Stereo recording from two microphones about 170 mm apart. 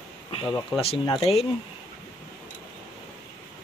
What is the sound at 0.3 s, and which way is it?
Speech, 30° left (ahead or behind).